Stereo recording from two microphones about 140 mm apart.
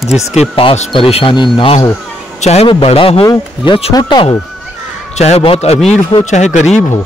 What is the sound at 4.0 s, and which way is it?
Speech, 30° left (ahead or behind).